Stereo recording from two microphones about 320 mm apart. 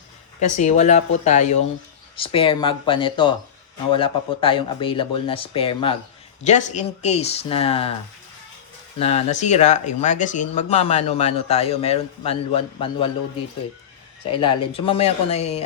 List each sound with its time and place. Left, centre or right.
0.3 s speech: left
9.0 s speech: centre
14.3 s speech: centre